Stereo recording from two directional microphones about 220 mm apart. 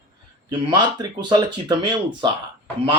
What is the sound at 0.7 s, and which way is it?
Speech, 20° right (ahead or behind).